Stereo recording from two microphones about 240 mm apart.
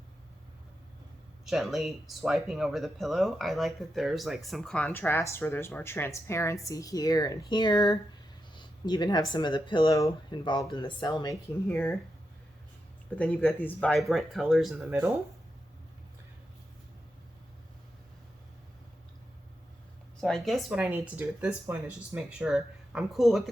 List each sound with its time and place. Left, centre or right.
1.5 s speech: centre
13.1 s speech: centre
20.2 s speech: centre